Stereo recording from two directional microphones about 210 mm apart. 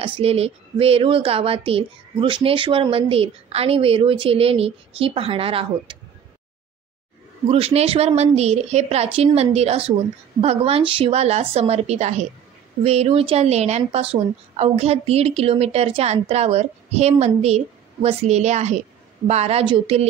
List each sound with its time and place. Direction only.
0.0 s a woman's voice: 30° right (ahead or behind)
7.4 s a woman's voice: 30° right (ahead or behind)